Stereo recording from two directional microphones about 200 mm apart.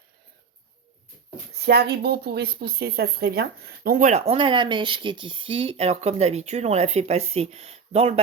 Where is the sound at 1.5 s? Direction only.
50° right (ahead or behind).